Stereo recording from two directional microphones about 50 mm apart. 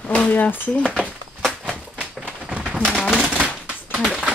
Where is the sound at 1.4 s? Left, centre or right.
Centre.